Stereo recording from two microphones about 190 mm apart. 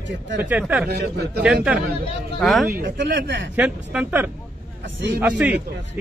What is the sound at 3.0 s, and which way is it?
Speech, 70° right (ahead or behind).